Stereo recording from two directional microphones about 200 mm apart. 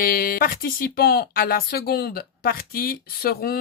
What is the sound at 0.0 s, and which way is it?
Speech, 45° left (ahead or behind).